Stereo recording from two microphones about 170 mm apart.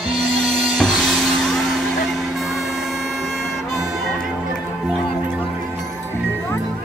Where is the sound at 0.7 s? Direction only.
Centre (ahead or behind).